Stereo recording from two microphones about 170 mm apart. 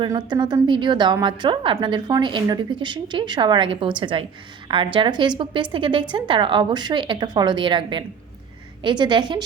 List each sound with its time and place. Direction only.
0.0 s a woman's voice: 25° right (ahead or behind)